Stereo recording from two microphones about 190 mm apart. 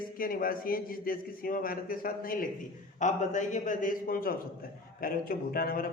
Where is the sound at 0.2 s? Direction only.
50° left (ahead or behind).